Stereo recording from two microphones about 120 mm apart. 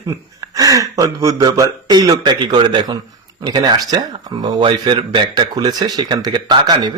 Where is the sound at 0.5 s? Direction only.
30° right (ahead or behind).